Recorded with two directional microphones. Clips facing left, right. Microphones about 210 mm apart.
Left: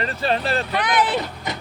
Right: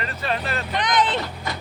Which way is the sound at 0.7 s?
10° left (ahead or behind).